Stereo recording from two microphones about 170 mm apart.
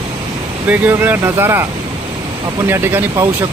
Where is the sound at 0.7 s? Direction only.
10° right (ahead or behind).